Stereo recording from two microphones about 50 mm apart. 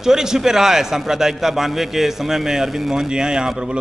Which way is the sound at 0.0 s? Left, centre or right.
Centre.